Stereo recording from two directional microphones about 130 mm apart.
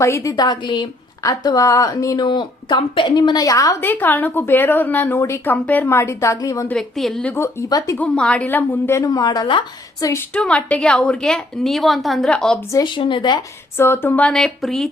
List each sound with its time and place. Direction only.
0.0 s a woman's voice: 25° left (ahead or behind)
6.7 s a woman's voice: 5° left (ahead or behind)
7.3 s a woman's voice: 25° left (ahead or behind)
7.9 s a woman's voice: 10° left (ahead or behind); by 9.6 s 35° left (ahead or behind)
10.0 s a woman's voice: 25° left (ahead or behind)
10.3 s a woman's voice: 10° left (ahead or behind)
12.8 s speech: 40° left (ahead or behind)
13.7 s a woman's voice: 20° left (ahead or behind); by 14.8 s centre (ahead or behind)